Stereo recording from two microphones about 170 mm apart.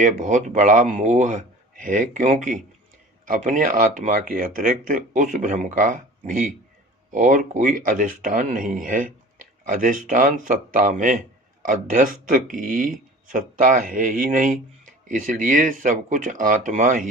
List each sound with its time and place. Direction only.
0.0 s speech: 45° right (ahead or behind)